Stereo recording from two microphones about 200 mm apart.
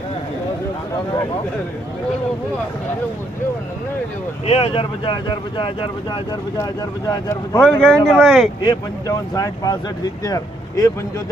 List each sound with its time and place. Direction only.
4.4 s speech: 30° left (ahead or behind); by 8.4 s centre (ahead or behind)
8.6 s speech: 20° left (ahead or behind)